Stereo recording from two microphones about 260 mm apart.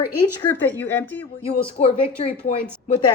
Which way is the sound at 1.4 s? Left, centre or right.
Left.